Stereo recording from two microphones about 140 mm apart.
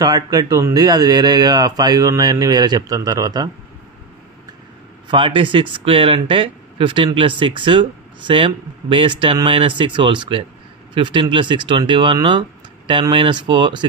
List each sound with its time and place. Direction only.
0.0 s speech: 30° right (ahead or behind)
5.0 s speech: 35° right (ahead or behind)